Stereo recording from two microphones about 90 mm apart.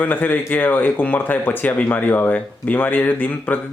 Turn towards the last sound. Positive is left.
turn(degrees=20)  # may be behind; listen again after turning